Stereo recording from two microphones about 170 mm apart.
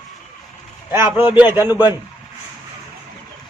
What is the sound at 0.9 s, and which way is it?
Speech, 15° right (ahead or behind).